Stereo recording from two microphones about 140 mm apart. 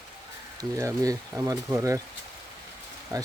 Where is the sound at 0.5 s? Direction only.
25° right (ahead or behind).